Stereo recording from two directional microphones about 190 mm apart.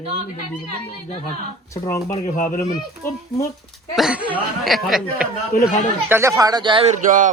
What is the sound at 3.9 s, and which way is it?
Speech, 5° right (ahead or behind).